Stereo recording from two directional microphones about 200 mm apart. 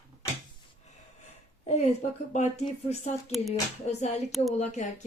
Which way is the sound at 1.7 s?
35° left (ahead or behind).